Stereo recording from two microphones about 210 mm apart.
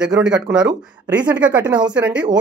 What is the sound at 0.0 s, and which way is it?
Speech, 5° right (ahead or behind).